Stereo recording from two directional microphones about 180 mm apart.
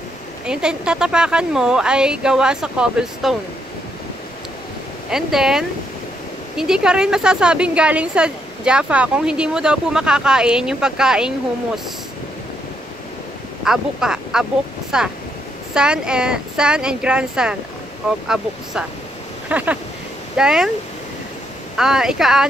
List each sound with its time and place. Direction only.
0.5 s a woman's voice: 5° right (ahead or behind)
5.1 s a woman's voice: 5° right (ahead or behind)
13.7 s a woman's voice: 5° right (ahead or behind)
21.7 s a woman's voice: 5° right (ahead or behind)